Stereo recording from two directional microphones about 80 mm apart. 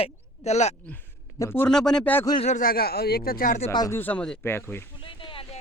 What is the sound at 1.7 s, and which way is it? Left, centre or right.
Speech, centre.